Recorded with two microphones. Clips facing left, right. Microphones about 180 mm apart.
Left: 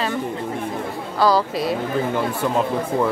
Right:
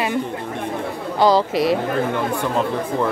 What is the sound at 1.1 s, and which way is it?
Speech, 20° right (ahead or behind).